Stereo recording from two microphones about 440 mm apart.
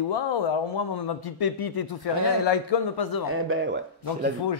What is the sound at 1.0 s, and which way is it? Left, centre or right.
A man's voice, left.